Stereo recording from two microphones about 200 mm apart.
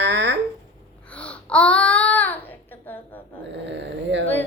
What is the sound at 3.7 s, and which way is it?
Speech, 60° right (ahead or behind).